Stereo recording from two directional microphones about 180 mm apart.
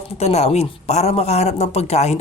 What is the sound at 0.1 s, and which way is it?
Speech, 35° left (ahead or behind).